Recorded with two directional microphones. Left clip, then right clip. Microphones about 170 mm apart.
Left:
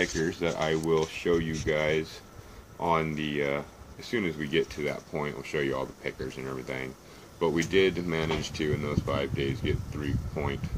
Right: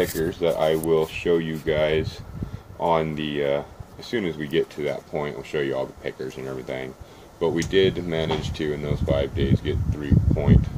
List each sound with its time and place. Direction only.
0.0 s speech: 55° left (ahead or behind)
0.8 s speech: 25° left (ahead or behind)